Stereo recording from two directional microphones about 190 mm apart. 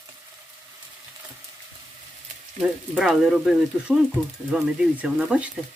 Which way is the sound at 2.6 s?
Centre (ahead or behind).